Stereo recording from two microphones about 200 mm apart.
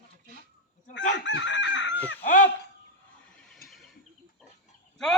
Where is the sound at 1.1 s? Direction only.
65° left (ahead or behind).